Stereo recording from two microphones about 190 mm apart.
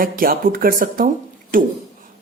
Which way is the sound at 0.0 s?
50° right (ahead or behind).